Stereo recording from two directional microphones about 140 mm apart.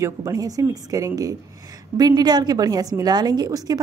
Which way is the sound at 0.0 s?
25° right (ahead or behind).